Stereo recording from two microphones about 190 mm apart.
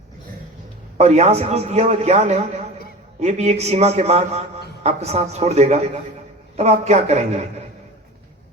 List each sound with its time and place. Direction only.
0.9 s a man's voice: 35° right (ahead or behind)